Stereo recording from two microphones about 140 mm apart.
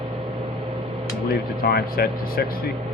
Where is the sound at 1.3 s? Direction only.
90° left.